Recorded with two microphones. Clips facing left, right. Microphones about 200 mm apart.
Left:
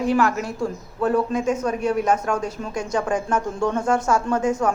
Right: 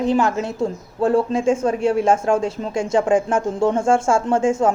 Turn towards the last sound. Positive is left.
turn(degrees=-25)  # may be behind; listen again after turning